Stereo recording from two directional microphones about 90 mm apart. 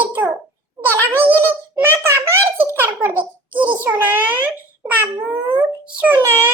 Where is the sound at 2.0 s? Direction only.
30° right (ahead or behind).